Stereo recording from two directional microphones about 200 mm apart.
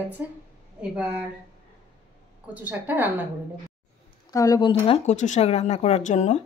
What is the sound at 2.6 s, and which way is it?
Speech, 10° right (ahead or behind).